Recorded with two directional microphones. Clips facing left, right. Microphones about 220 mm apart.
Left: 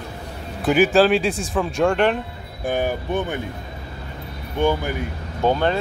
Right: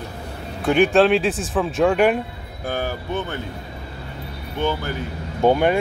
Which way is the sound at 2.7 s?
15° left (ahead or behind).